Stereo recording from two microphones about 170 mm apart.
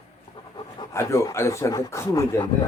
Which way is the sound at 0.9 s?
15° left (ahead or behind).